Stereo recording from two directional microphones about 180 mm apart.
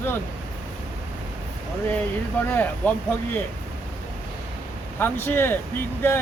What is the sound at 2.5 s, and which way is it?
Speech, 5° left (ahead or behind).